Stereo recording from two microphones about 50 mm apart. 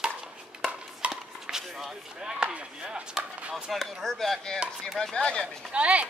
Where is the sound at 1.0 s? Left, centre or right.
Right.